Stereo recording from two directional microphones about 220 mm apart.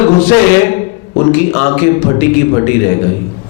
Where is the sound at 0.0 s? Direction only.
10° left (ahead or behind).